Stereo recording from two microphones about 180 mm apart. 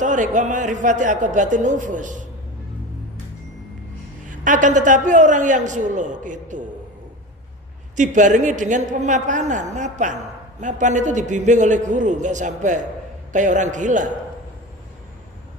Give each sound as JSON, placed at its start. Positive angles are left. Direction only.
{"t": 0.0, "sound": "a man's voice", "side_deg": -45}
{"t": 4.3, "sound": "a man's voice", "side_deg": -45}
{"t": 7.9, "sound": "a man's voice", "side_deg": -45}